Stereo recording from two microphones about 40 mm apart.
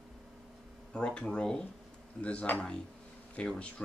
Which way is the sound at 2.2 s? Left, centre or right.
Left.